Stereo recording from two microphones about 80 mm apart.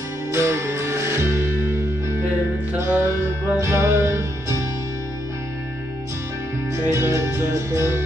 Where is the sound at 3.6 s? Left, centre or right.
Right.